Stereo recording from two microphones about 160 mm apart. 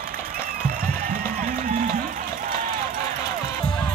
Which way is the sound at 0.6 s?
65° right (ahead or behind).